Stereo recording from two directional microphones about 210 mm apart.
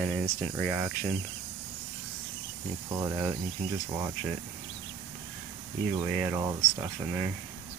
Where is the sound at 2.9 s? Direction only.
10° right (ahead or behind).